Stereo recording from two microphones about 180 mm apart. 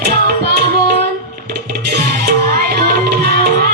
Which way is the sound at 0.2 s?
60° right (ahead or behind).